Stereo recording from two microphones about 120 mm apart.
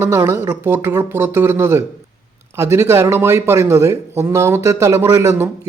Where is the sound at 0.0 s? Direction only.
20° right (ahead or behind).